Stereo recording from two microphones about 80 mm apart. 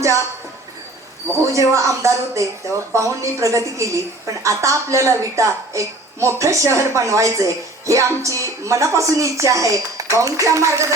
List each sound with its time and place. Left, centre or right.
0.0 s speech: right
1.5 s speech: right